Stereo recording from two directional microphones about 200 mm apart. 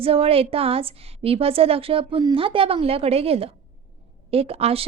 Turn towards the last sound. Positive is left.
turn(degrees=-30)  # may be behind; listen again after turning